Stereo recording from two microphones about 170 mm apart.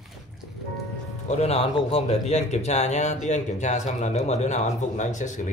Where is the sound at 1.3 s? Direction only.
40° left (ahead or behind).